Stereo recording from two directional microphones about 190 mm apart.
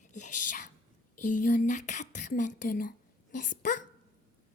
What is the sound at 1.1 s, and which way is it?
A child's voice, 45° left (ahead or behind).